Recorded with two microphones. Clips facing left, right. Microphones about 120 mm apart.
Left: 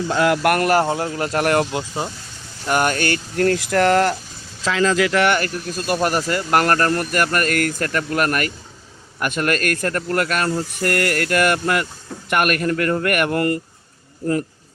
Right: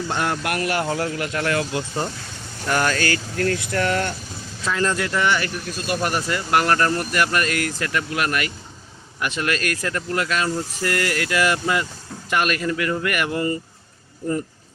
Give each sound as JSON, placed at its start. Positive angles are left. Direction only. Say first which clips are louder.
{"t": 0.4, "sound": "speech", "louder": "left 7 dB", "side_deg": 50}
{"t": 0.9, "sound": "speech", "louder": "left 2 dB", "side_deg": 25}
{"t": 3.3, "sound": "speech", "louder": "left 8 dB", "side_deg": 40}
{"t": 4.6, "sound": "speech", "louder": "left 5 dB", "side_deg": 90}
{"t": 5.4, "sound": "speech", "louder": "left 3 dB", "side_deg": 45}